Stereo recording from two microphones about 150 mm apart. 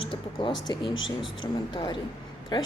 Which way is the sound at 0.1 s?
35° left (ahead or behind).